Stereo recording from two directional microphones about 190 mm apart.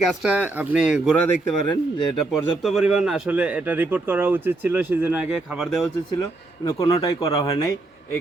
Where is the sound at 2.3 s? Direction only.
Centre (ahead or behind).